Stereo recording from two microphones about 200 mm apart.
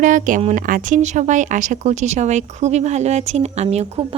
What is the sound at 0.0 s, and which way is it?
A woman's voice, 40° right (ahead or behind).